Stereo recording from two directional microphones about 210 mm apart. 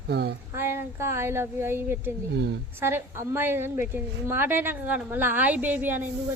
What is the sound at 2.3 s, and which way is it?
Speech, 55° right (ahead or behind).